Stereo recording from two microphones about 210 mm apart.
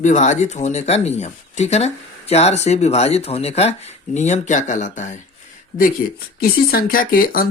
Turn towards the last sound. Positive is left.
turn(degrees=40)  # may be behind; listen again after turning